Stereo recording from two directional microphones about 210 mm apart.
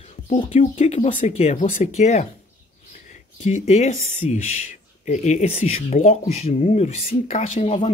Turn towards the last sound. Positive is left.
turn(degrees=30)  # may be behind; listen again after turning